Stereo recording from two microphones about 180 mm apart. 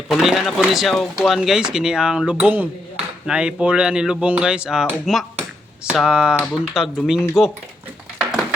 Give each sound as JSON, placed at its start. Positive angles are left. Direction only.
{"t": 0.1, "sound": "cutlery", "side_deg": 0}